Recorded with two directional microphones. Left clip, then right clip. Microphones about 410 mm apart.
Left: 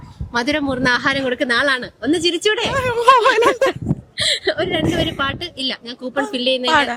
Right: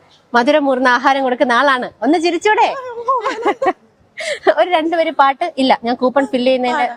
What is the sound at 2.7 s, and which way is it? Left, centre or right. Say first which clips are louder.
Speech: left 3 dB; left.